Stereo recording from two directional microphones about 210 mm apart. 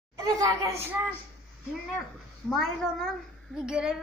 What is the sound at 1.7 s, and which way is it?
A child's voice, centre (ahead or behind).